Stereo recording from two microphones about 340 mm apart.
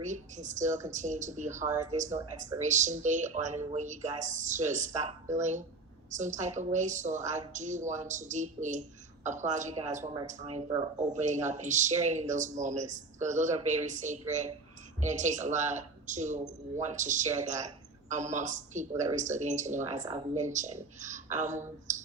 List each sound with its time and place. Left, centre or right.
0.0 s speech: right